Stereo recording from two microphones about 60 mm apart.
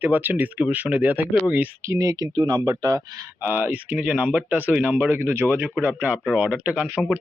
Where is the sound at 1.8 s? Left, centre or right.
Right.